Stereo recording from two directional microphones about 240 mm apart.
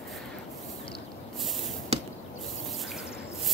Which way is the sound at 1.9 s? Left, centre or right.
Right.